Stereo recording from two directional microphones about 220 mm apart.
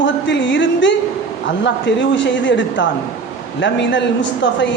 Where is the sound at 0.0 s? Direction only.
55° left (ahead or behind).